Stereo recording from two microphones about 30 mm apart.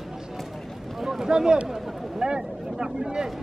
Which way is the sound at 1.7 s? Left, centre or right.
Centre.